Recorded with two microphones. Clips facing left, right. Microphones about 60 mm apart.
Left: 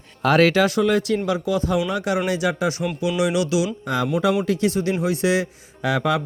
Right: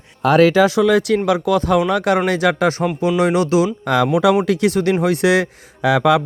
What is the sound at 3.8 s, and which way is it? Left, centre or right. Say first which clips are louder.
Speech: right 6 dB; right.